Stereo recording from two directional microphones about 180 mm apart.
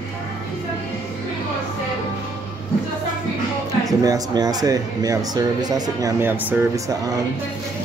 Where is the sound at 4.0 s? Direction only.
20° right (ahead or behind).